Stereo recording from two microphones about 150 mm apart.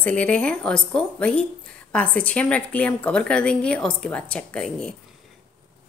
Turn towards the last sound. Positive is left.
turn(degrees=5)  # may be behind; listen again after turning